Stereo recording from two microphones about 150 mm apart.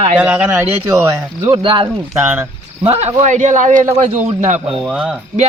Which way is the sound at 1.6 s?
35° right (ahead or behind).